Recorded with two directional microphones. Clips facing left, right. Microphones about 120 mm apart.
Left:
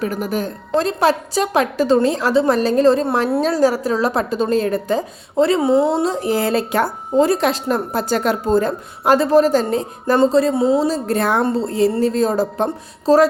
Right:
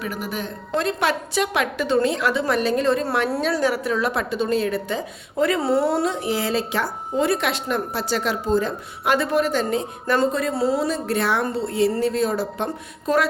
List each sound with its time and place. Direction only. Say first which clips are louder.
0.0 s speech: left 7 dB; 40° left (ahead or behind); by 3.4 s 25° left (ahead or behind)
3.4 s speech: left 5 dB; 40° left (ahead or behind)
5.4 s a woman's voice: left 5 dB; 25° left (ahead or behind)
6.1 s speech: left 5 dB; 40° left (ahead or behind)
7.2 s a woman's voice: left 6 dB; 35° left (ahead or behind)